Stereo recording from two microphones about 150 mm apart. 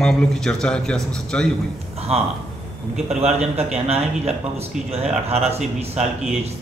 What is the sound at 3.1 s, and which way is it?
A man's voice, 45° right (ahead or behind).